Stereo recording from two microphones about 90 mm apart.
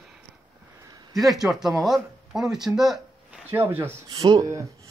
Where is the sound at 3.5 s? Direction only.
25° right (ahead or behind).